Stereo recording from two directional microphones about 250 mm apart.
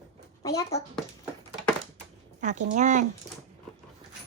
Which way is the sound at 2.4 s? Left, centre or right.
Right.